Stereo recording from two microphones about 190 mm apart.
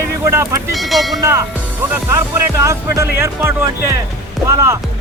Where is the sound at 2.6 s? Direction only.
15° right (ahead or behind).